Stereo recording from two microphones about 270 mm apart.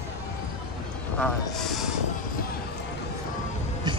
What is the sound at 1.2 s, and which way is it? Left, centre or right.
Speech, centre.